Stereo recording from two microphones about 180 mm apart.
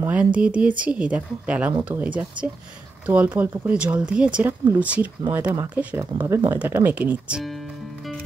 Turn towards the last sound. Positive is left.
turn(degrees=0)  # may be behind; listen again after turning